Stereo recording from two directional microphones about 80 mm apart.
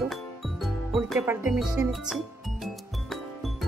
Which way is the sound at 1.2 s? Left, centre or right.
Right.